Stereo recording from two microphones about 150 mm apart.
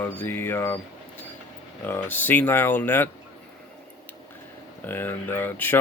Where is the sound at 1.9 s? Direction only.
10° left (ahead or behind).